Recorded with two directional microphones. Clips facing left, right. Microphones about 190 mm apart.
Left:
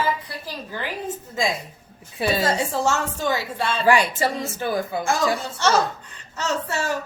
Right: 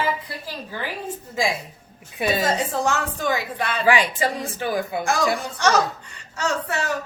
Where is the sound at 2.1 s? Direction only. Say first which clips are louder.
Even; 15° right (ahead or behind).